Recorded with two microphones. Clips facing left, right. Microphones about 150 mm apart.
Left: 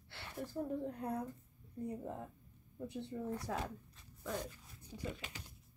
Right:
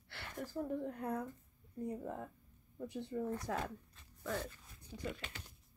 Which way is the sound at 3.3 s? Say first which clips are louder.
Right 1 dB; 10° left (ahead or behind).